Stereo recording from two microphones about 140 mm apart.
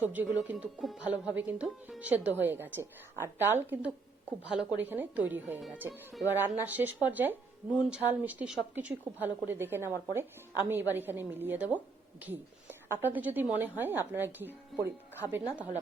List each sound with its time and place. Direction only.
0.1 s speech: 10° right (ahead or behind)
0.5 s speech: centre (ahead or behind)
12.2 s a sound: 15° right (ahead or behind)
13.1 s speech: 10° right (ahead or behind)